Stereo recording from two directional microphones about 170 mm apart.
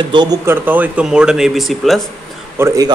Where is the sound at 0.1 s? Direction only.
25° right (ahead or behind).